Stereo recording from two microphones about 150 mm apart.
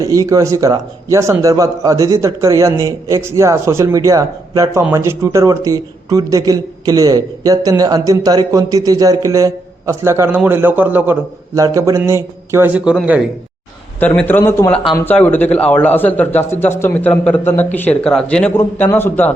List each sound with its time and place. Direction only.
0.0 s a man's voice: 20° right (ahead or behind); by 13.2 s 5° right (ahead or behind)
14.2 s a man's voice: 10° left (ahead or behind)